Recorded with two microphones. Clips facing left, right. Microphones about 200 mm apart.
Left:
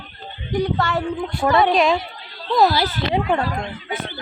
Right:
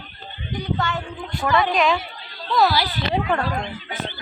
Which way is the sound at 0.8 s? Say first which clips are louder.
Left 5 dB; 35° left (ahead or behind).